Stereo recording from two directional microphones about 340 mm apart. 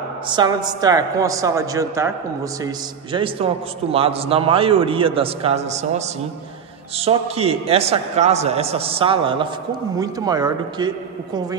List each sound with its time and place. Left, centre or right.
0.4 s a man's voice: centre